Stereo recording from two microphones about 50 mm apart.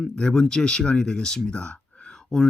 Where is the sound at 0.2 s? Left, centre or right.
Centre.